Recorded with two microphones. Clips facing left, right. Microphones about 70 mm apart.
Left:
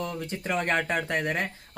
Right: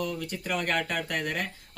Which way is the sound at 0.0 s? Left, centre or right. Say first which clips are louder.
Even; left.